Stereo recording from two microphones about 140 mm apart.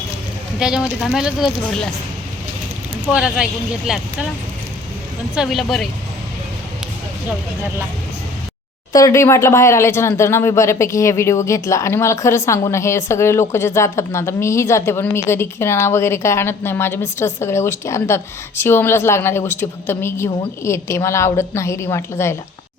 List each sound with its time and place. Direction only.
0.6 s speech: 5° right (ahead or behind)
3.1 s speech: 5° right (ahead or behind)
5.3 s speech: centre (ahead or behind)
8.9 s a woman's voice: 25° left (ahead or behind)